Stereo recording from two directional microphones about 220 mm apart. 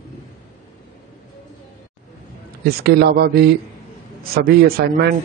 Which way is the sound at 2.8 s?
45° right (ahead or behind).